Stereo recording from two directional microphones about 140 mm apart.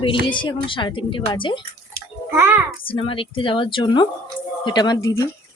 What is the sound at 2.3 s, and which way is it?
Speech, 15° right (ahead or behind).